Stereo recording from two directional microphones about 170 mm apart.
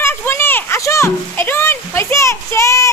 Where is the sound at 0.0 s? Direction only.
15° left (ahead or behind).